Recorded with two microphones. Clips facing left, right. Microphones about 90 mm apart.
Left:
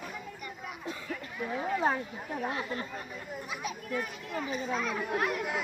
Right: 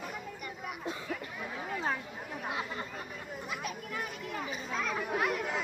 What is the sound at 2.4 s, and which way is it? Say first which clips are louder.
Speech: left 2 dB; 5° right (ahead or behind).